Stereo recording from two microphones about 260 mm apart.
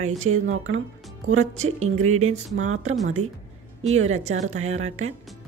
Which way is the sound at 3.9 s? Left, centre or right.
Right.